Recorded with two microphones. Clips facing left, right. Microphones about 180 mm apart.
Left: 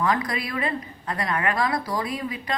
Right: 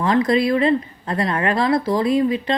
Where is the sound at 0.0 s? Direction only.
25° right (ahead or behind).